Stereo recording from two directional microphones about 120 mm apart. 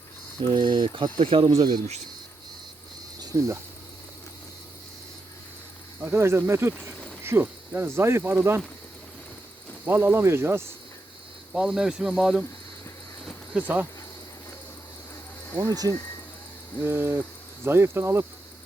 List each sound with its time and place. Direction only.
0.5 s speech: 40° right (ahead or behind)
3.2 s cricket: 30° right (ahead or behind)
6.0 s cricket: 20° right (ahead or behind)
9.8 s cricket: 20° right (ahead or behind)
11.5 s speech: 5° right (ahead or behind)
13.5 s cricket: 15° right (ahead or behind)
15.4 s cricket: 20° left (ahead or behind)
16.8 s cricket: 20° right (ahead or behind)